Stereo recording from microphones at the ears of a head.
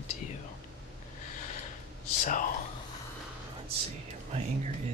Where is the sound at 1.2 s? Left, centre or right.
Left.